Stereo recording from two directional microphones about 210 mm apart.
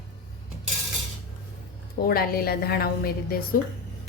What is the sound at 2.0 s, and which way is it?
Speech, 45° left (ahead or behind).